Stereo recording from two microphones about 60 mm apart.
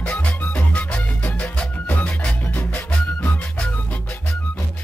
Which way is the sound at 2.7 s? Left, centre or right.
Centre.